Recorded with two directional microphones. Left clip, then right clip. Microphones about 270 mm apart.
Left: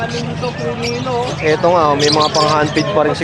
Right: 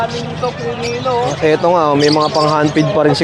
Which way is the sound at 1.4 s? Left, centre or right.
Right.